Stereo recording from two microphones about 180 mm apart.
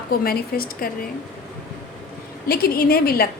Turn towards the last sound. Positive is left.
turn(degrees=55)  # may be behind; listen again after turning